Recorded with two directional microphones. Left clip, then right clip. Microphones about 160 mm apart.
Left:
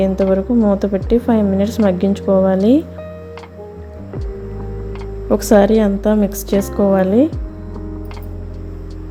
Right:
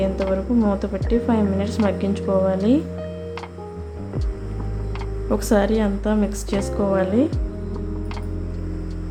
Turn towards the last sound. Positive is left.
turn(degrees=30)  # may be behind; listen again after turning